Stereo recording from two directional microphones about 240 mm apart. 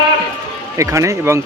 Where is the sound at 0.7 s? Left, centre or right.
Centre.